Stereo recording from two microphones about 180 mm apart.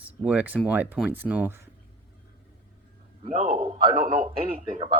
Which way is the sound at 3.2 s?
35° right (ahead or behind).